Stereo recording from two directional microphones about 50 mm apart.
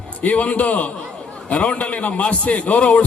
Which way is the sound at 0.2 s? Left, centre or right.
Left.